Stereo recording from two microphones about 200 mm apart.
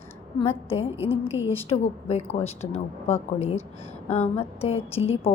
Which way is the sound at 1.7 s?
35° left (ahead or behind).